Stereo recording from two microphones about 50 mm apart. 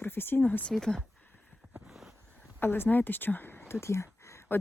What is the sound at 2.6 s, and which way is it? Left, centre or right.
Speech, left.